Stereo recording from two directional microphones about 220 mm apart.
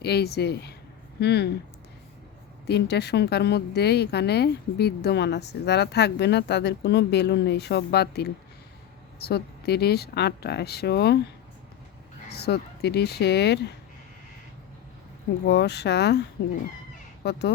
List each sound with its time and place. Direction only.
0.0 s a woman's voice: 45° left (ahead or behind)
2.6 s a woman's voice: 50° left (ahead or behind)
12.3 s a woman's voice: 50° left (ahead or behind)
15.4 s a woman's voice: 50° left (ahead or behind)
17.2 s a woman's voice: 50° left (ahead or behind)